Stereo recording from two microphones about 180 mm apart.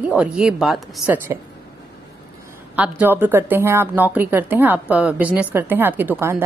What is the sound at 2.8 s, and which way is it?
A woman's voice, 10° right (ahead or behind).